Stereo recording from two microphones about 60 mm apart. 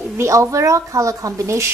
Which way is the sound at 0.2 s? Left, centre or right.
Right.